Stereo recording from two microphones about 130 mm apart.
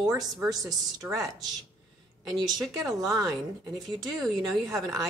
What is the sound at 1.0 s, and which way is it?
Speech, 25° right (ahead or behind).